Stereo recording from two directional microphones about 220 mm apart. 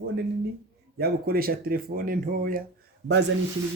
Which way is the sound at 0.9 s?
45° right (ahead or behind).